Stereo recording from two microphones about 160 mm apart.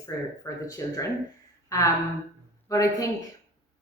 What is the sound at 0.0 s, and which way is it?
Speech, 20° left (ahead or behind).